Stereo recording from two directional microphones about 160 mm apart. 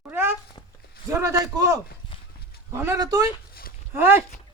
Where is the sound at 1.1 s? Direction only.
20° right (ahead or behind).